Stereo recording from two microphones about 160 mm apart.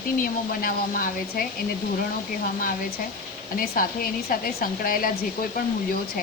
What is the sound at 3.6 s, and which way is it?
Speech, 65° left (ahead or behind).